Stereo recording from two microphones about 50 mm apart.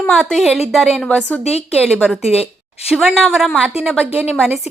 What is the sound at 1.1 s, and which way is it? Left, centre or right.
Speech, left.